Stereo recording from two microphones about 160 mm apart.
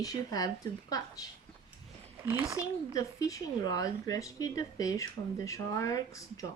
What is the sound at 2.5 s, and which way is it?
Speech, 20° left (ahead or behind).